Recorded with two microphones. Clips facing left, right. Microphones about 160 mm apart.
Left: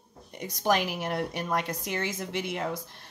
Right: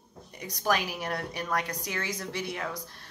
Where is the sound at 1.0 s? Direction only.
20° left (ahead or behind).